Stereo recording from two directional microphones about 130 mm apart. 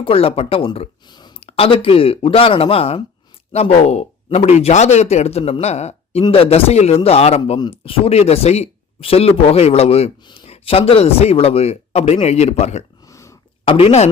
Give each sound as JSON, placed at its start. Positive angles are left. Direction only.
{"t": 0.0, "sound": "speech", "side_deg": 45}
{"t": 13.1, "sound": "a sound", "side_deg": 25}
{"t": 13.7, "sound": "speech", "side_deg": 45}